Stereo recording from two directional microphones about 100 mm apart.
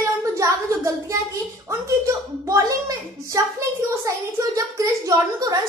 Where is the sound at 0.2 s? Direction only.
30° right (ahead or behind).